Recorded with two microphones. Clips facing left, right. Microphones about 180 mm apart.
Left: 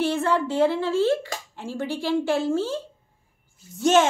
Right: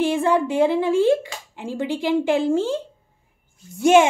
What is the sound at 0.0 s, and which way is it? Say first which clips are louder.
Speech: right 4 dB; 15° right (ahead or behind).